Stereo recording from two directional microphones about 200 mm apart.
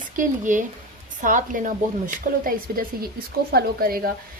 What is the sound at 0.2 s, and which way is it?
A woman's voice, 40° right (ahead or behind).